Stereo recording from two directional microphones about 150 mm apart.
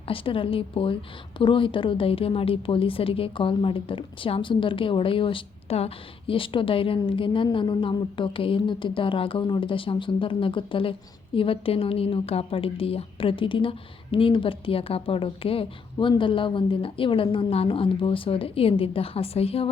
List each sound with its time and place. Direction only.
0.1 s a woman's voice: 35° left (ahead or behind)